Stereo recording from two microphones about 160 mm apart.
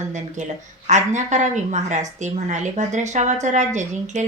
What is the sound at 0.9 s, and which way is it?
A woman's voice, 50° right (ahead or behind).